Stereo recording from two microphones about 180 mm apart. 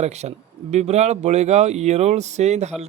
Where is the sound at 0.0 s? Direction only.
40° right (ahead or behind).